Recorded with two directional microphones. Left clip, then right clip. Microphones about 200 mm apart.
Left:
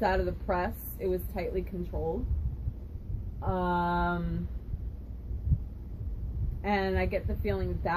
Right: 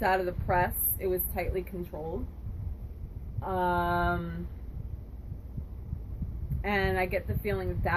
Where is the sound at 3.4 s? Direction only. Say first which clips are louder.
Right 1 dB; 5° right (ahead or behind).